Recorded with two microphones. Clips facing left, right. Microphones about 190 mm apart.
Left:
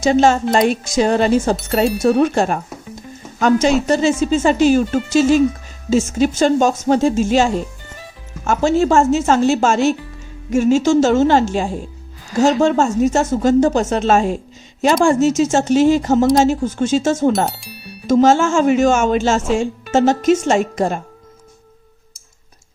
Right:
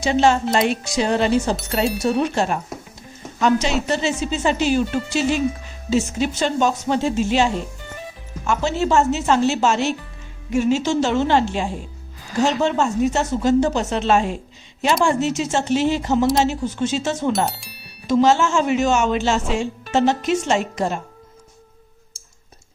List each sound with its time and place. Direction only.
0.0 s speech: 45° left (ahead or behind)
1.5 s speech: centre (ahead or behind)
2.0 s speech: 50° left (ahead or behind)
3.8 s speech: 45° left (ahead or behind)
17.3 s music: centre (ahead or behind)
18.0 s speech: 45° left (ahead or behind)